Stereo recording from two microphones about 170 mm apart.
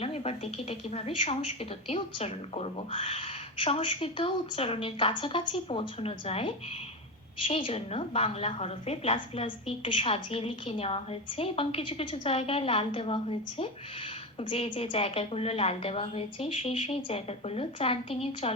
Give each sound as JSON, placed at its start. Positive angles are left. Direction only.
{"t": 0.0, "sound": "a woman's voice", "side_deg": 35}